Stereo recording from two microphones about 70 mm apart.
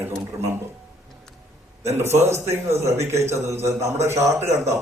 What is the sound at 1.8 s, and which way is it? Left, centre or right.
A man's voice, right.